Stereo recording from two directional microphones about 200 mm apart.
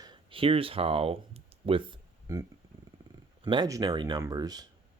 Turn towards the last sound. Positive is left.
turn(degrees=-20)  # may be behind; listen again after turning